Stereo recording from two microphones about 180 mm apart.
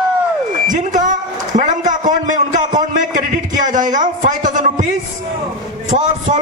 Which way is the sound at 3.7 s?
45° right (ahead or behind).